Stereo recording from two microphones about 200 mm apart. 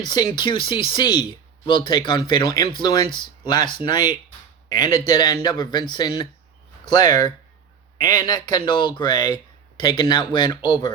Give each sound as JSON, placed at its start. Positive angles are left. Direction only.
{"t": 0.0, "sound": "speech", "side_deg": 20}